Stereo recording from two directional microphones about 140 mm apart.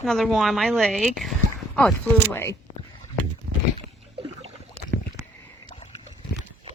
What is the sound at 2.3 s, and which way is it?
Speech, 15° left (ahead or behind).